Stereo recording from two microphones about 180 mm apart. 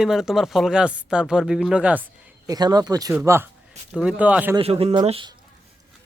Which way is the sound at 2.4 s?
20° right (ahead or behind).